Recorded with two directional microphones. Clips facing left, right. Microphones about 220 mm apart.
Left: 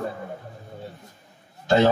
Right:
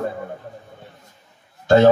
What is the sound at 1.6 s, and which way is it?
Speech, 50° right (ahead or behind).